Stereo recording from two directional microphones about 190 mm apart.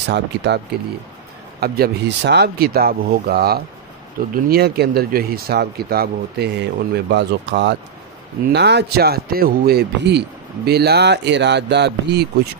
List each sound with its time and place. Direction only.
0.1 s a man's voice: 65° right (ahead or behind)
1.6 s a man's voice: 60° right (ahead or behind)